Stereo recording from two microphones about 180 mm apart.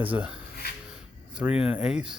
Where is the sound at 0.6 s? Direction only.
60° left (ahead or behind).